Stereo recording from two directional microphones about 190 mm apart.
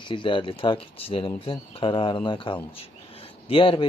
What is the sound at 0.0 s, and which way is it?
Speech, 25° left (ahead or behind).